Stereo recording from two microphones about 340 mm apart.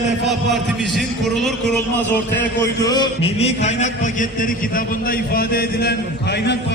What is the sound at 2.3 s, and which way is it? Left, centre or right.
A man's voice, centre.